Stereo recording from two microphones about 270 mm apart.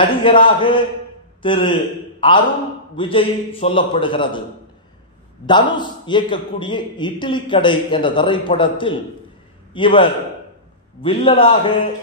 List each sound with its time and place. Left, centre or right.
0.0 s a man's voice: centre
5.5 s a man's voice: centre